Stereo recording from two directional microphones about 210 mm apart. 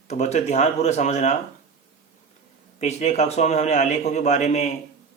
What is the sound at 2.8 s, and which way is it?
Speech, 35° left (ahead or behind).